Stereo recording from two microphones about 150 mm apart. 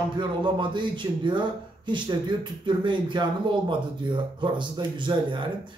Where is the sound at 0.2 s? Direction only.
30° right (ahead or behind).